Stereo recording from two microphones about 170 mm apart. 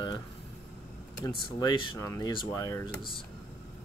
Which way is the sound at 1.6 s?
30° left (ahead or behind).